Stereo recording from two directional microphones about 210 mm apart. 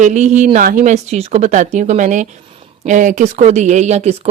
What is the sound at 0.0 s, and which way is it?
Speech, 35° right (ahead or behind).